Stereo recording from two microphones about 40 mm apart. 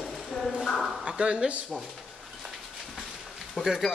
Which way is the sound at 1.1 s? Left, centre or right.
Right.